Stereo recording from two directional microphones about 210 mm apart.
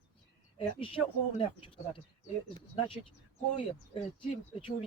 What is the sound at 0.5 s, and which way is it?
Speech, 25° left (ahead or behind).